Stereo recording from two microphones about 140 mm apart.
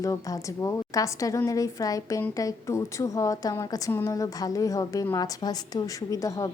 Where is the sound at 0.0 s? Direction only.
25° left (ahead or behind).